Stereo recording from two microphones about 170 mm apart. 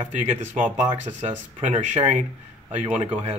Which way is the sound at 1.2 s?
45° right (ahead or behind).